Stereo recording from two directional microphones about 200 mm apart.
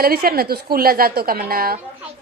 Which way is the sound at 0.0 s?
50° right (ahead or behind).